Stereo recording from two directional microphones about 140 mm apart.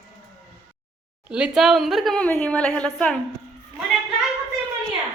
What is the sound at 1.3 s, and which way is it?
A woman's voice, 5° right (ahead or behind).